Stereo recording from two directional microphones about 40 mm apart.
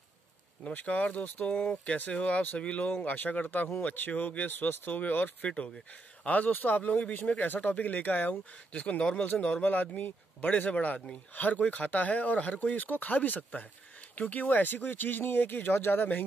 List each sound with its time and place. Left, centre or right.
0.7 s speech: left
2.9 s speech: left
4.1 s speech: left
4.5 s speech: left
7.4 s speech: left
8.7 s speech: left
9.7 s speech: left